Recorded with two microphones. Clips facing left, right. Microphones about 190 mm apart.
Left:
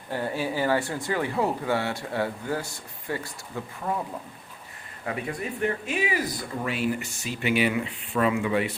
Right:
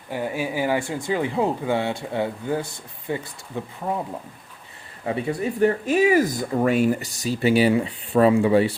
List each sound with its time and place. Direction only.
0.1 s speech: 15° right (ahead or behind)
5.0 s speech: 25° right (ahead or behind)